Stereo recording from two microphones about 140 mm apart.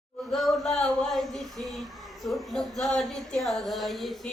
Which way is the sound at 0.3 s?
Centre (ahead or behind).